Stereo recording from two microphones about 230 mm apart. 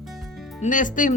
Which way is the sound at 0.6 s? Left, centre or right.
Left.